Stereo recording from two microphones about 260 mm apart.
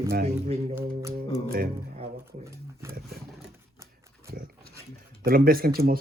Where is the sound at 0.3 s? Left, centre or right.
Right.